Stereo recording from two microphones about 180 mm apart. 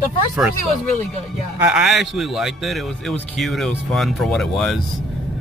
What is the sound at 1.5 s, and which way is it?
A man's voice, centre (ahead or behind).